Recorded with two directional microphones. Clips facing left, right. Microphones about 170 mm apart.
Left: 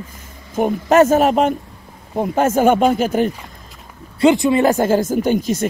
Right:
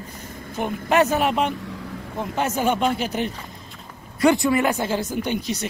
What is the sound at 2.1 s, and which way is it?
Speech, 50° left (ahead or behind).